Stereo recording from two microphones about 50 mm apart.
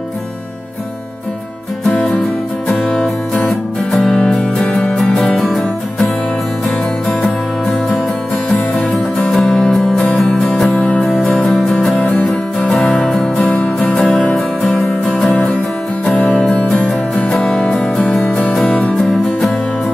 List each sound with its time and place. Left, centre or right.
2.7 s music: centre
4.4 s music: left
4.9 s music: centre
9.3 s music: centre
10.2 s music: centre
11.8 s music: centre
12.5 s music: centre
13.4 s music: left
13.9 s music: centre
14.7 s music: left
17.1 s music: centre
18.5 s music: centre